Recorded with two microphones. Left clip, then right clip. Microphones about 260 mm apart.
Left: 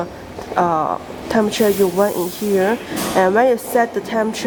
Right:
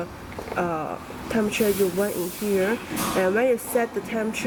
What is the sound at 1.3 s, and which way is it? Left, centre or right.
Speech, left.